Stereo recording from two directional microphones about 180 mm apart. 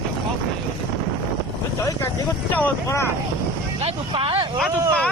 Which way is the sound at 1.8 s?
15° left (ahead or behind).